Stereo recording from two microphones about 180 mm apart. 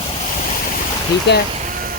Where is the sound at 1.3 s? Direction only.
70° left (ahead or behind).